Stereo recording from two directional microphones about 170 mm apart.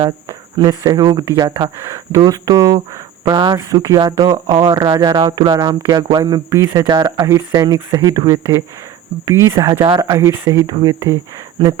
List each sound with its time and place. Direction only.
0.3 s speech: 25° right (ahead or behind)